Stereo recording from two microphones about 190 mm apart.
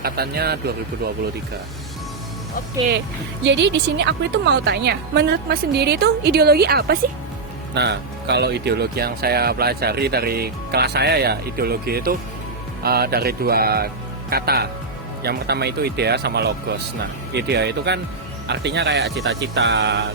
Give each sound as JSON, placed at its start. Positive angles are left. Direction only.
{"t": 0.0, "sound": "speech", "side_deg": -55}
{"t": 3.4, "sound": "speech", "side_deg": -65}